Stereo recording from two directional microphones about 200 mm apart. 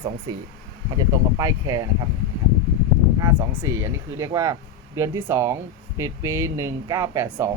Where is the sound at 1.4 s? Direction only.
15° right (ahead or behind).